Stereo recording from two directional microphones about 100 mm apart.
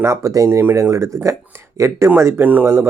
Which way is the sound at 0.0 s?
30° right (ahead or behind).